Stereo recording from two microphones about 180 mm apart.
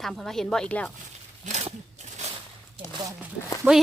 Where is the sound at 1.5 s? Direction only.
40° right (ahead or behind).